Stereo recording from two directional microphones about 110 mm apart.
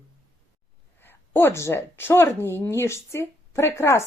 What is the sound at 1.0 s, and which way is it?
A woman's voice, 20° left (ahead or behind).